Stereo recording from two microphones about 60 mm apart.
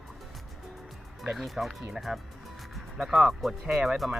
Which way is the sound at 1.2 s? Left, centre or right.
Centre.